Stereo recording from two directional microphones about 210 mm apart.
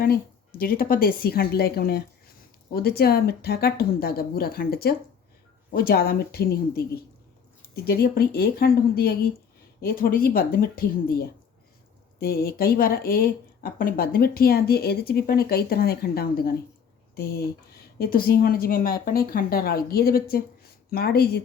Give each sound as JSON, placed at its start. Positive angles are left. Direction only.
{"t": 0.6, "sound": "speech", "side_deg": 45}
{"t": 7.9, "sound": "speech", "side_deg": 50}